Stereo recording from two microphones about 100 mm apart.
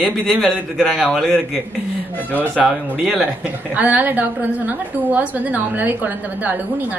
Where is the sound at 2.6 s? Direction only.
5° right (ahead or behind).